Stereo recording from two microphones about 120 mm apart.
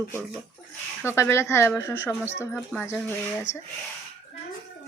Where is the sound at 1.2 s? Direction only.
20° left (ahead or behind).